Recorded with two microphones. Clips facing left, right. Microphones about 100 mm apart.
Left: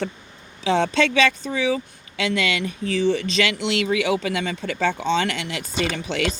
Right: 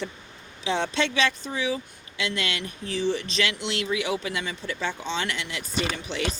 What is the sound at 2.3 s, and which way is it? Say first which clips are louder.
Speech: left 7 dB; 90° left.